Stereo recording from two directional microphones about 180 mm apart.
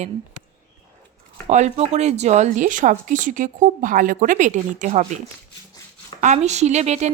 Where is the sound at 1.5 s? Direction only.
40° right (ahead or behind).